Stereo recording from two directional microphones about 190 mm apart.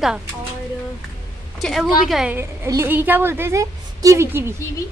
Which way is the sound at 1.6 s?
Centre (ahead or behind).